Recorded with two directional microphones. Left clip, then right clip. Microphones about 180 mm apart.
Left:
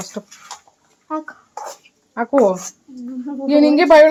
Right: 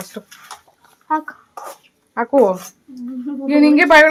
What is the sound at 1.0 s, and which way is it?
Speech, 55° right (ahead or behind).